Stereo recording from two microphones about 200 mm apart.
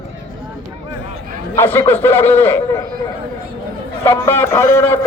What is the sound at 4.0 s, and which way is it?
A man's voice, 10° left (ahead or behind).